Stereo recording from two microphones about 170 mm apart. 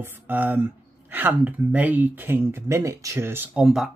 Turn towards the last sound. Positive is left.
turn(degrees=0)  # may be behind; listen again after turning